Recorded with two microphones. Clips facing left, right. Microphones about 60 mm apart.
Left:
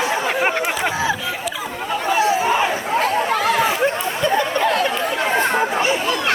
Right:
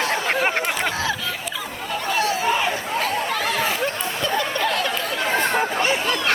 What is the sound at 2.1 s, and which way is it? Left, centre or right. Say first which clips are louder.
Chatter: left 4 dB; left.